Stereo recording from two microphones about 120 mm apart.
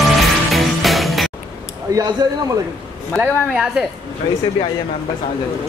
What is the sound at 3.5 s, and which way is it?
Speech, 5° right (ahead or behind).